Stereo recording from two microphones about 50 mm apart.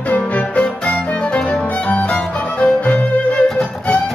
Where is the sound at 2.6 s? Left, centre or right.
Left.